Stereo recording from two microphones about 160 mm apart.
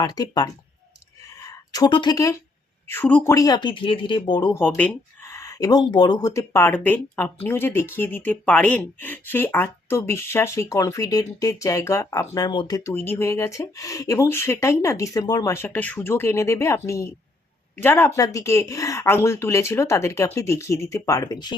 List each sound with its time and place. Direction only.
0.0 s speech: 25° left (ahead or behind)
1.7 s speech: 30° left (ahead or behind); by 3.3 s 10° left (ahead or behind)
3.3 s speech: 25° left (ahead or behind)
4.6 s speech: 10° left (ahead or behind)